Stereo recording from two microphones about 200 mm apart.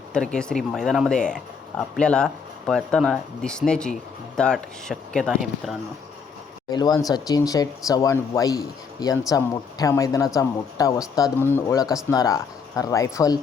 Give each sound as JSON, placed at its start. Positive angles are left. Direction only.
{"t": 0.1, "sound": "speech", "side_deg": 5}
{"t": 6.7, "sound": "speech", "side_deg": 20}